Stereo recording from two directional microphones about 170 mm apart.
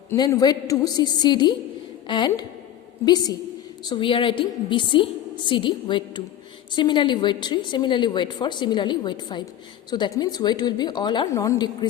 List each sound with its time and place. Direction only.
0.2 s a woman's voice: 20° left (ahead or behind)